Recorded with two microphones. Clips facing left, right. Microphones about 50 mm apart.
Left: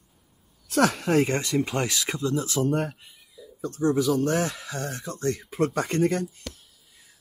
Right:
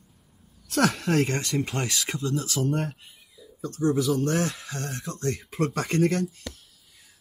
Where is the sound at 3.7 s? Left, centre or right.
Left.